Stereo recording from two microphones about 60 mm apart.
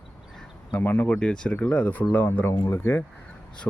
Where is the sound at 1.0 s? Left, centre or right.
Centre; by 3.0 s left.